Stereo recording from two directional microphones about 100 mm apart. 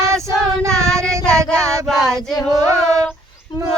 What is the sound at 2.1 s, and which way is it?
Child singing, 5° left (ahead or behind).